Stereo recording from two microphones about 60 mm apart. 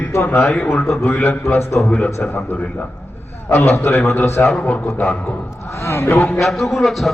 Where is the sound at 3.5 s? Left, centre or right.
Left.